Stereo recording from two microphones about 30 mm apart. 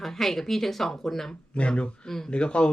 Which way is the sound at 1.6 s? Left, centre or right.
Left.